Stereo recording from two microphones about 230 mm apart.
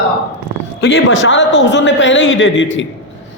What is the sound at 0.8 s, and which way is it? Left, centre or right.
A man's voice, left.